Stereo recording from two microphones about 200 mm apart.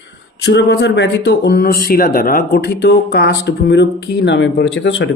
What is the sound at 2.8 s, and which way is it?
Speech, 55° left (ahead or behind).